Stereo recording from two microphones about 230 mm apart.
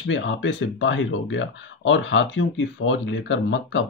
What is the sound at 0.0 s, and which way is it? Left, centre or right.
Speech, left.